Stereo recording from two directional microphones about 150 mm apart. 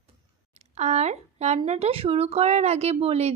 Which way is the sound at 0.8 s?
50° right (ahead or behind).